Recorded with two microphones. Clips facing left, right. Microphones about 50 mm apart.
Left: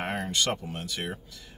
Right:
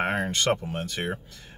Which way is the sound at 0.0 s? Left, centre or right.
Right.